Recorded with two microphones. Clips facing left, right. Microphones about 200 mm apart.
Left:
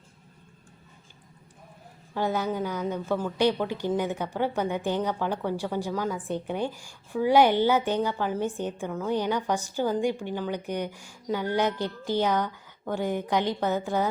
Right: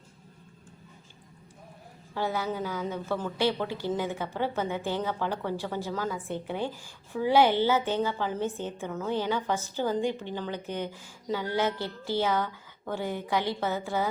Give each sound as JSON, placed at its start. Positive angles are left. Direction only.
{"t": 2.1, "sound": "a woman's voice", "side_deg": 15}